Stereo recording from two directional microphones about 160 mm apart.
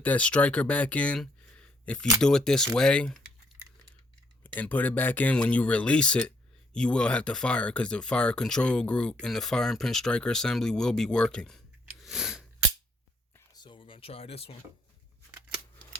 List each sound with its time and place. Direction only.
0.0 s speech: 10° left (ahead or behind)
4.4 s speech: 10° left (ahead or behind)
13.3 s a sound: 25° left (ahead or behind)